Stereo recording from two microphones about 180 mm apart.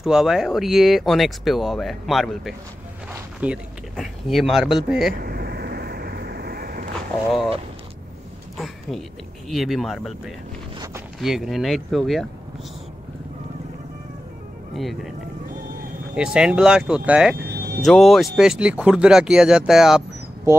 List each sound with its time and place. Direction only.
0.0 s speech: centre (ahead or behind)
5.1 s vehicle: 55° right (ahead or behind)
9.5 s speech: centre (ahead or behind)
14.7 s speech: centre (ahead or behind)
16.2 s speech: 5° right (ahead or behind)
17.4 s music: 60° right (ahead or behind)
17.8 s speech: centre (ahead or behind)